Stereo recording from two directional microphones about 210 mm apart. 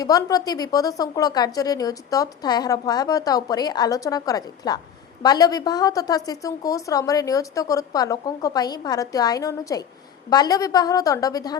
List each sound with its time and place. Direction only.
0.0 s a woman's voice: 15° left (ahead or behind)